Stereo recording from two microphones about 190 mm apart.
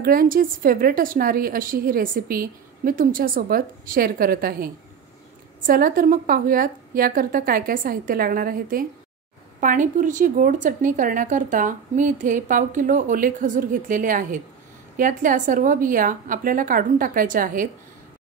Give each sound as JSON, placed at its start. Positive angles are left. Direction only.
{"t": 0.0, "sound": "a woman's voice", "side_deg": -50}
{"t": 5.7, "sound": "a woman's voice", "side_deg": -45}